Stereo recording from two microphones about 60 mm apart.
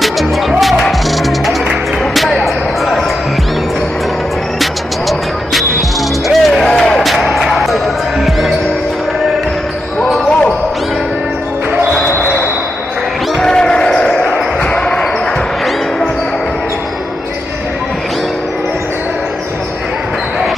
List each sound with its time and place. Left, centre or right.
0.5 s music: centre
2.1 s a sound: centre
6.2 s music: centre
13.4 s basketball bounce: centre
14.6 s basketball bounce: centre